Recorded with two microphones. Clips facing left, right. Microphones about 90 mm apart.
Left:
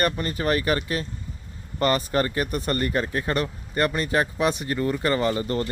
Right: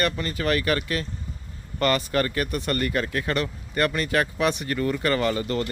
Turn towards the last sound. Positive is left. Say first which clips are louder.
# left 1 dB
turn(degrees=30)  # may be behind; listen again after turning